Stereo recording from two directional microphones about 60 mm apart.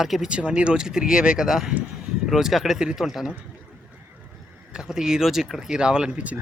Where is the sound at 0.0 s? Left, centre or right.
Centre.